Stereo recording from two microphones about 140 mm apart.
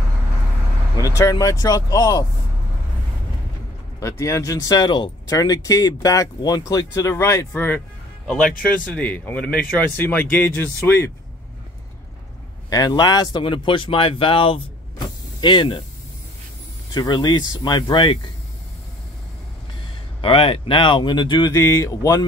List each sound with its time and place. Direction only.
0.9 s speech: 25° left (ahead or behind)
4.0 s a man's voice: 20° left (ahead or behind)
12.6 s speech: 25° left (ahead or behind)
16.9 s speech: 30° left (ahead or behind)
20.2 s speech: 40° left (ahead or behind)
21.5 s speech: 20° left (ahead or behind)